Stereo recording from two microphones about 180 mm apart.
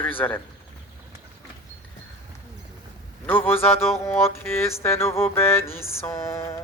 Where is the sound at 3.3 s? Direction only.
10° left (ahead or behind).